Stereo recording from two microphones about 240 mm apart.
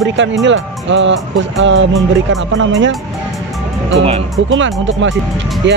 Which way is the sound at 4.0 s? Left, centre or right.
Right.